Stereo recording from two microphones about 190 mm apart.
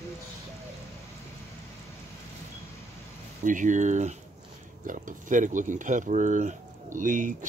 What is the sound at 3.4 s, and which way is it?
Speech, 40° right (ahead or behind).